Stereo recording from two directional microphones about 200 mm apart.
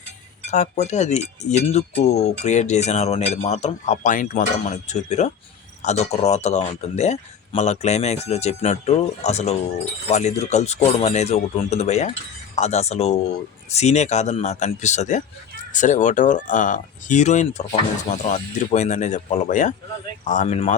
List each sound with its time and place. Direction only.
0.5 s speech: 35° left (ahead or behind)